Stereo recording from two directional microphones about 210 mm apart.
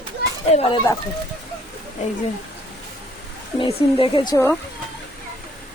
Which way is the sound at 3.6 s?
25° left (ahead or behind).